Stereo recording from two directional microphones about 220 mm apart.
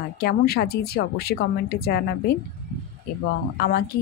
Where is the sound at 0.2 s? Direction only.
45° left (ahead or behind).